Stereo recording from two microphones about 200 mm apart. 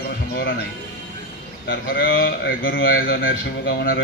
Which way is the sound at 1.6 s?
50° left (ahead or behind).